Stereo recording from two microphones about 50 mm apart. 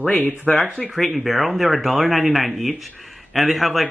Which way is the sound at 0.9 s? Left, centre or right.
Centre.